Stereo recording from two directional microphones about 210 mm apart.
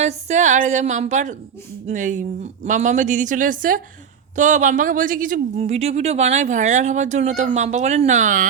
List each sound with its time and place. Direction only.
0.0 s speech: 30° right (ahead or behind)